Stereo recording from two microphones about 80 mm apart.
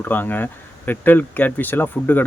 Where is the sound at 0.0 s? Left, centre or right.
Left.